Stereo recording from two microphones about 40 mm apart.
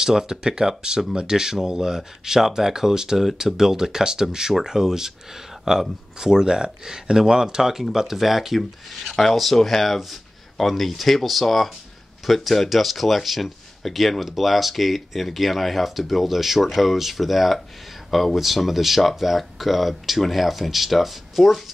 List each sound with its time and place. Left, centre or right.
0.0 s speech: centre